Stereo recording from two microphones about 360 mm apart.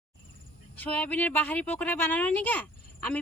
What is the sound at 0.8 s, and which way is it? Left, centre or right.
Speech, centre.